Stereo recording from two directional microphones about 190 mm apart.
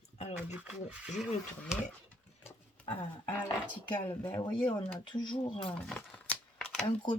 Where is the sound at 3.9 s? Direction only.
25° left (ahead or behind).